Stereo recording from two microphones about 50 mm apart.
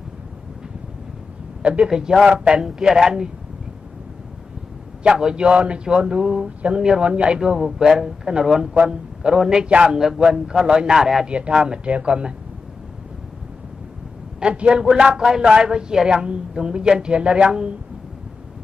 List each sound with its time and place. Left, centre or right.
1.6 s speech: right
1.9 s a man's voice: centre
5.0 s a man's voice: centre
9.9 s a man's voice: centre
11.2 s speech: right
14.4 s a man's voice: right